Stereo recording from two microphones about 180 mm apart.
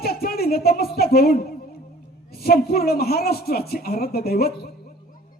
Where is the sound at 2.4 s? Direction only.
55° left (ahead or behind).